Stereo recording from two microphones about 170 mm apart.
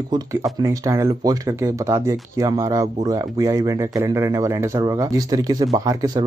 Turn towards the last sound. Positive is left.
turn(degrees=-20)  # may be behind; listen again after turning